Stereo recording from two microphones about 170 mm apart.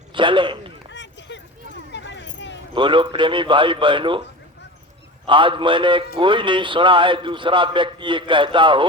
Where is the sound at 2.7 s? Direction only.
30° right (ahead or behind).